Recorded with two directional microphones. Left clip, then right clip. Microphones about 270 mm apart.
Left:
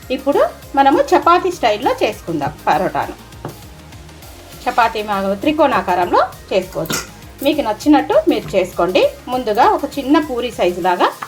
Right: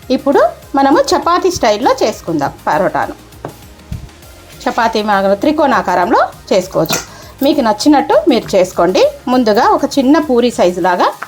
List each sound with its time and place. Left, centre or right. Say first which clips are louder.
0.1 s speech: right 5 dB; right
4.6 s speech: right 2 dB; right